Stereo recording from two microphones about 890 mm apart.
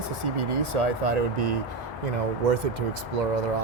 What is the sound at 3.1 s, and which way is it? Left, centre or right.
Speech, right.